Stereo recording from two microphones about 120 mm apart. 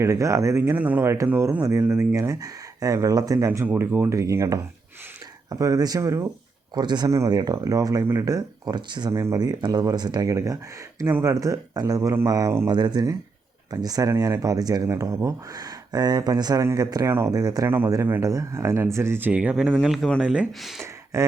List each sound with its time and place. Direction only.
0.0 s speech: 25° right (ahead or behind)
6.7 s speech: 35° right (ahead or behind)
9.1 s speech: 25° right (ahead or behind)
19.8 s speech: centre (ahead or behind)
20.2 s speech: 10° right (ahead or behind)